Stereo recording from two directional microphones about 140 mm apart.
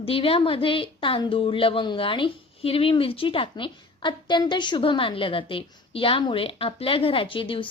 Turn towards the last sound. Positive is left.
turn(degrees=40)  # may be behind; listen again after turning